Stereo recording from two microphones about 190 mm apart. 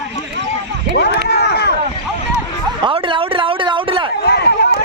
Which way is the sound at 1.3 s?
60° left (ahead or behind).